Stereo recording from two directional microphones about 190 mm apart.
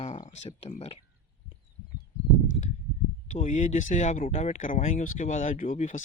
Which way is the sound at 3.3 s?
40° left (ahead or behind).